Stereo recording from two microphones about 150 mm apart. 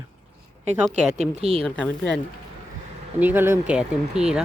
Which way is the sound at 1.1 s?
45° right (ahead or behind).